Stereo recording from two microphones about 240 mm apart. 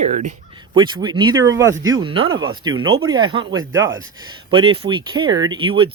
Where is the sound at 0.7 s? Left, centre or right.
Centre.